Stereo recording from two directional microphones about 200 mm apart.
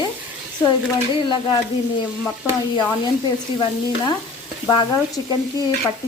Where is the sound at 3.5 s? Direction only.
25° left (ahead or behind).